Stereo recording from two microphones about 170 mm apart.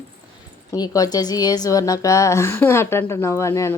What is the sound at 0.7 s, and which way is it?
A woman's voice, 20° left (ahead or behind).